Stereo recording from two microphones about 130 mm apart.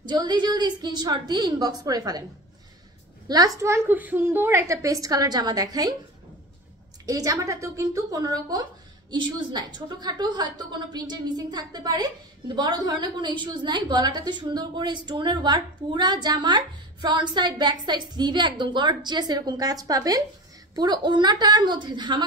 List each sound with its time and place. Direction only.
0.0 s a woman's voice: 35° right (ahead or behind)
3.3 s a woman's voice: 30° right (ahead or behind)
7.1 s a woman's voice: 25° right (ahead or behind)